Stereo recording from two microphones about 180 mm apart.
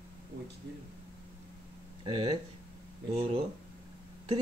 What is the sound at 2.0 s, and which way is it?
Speech, 25° right (ahead or behind).